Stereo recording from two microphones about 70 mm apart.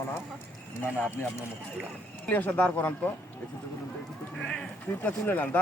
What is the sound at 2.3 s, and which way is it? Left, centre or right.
Speech, left.